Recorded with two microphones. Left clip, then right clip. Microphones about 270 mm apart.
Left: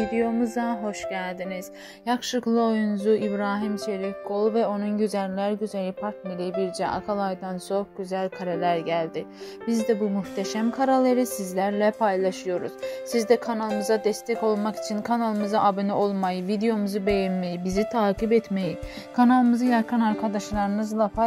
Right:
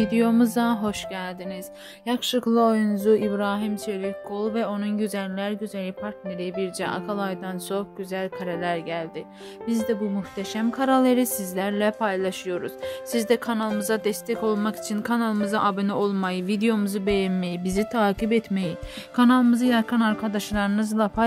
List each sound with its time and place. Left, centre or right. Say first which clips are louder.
0.1 s a woman's voice: right 3 dB; right
2.0 s a woman's voice: right 1 dB; centre